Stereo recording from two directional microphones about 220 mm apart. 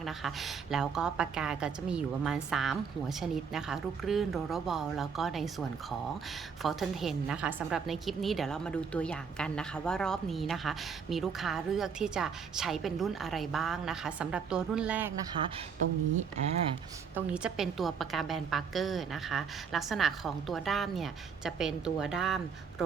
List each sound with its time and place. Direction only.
0.0 s a woman's voice: centre (ahead or behind)
15.3 s speech: 25° right (ahead or behind)
17.2 s a woman's voice: 5° right (ahead or behind)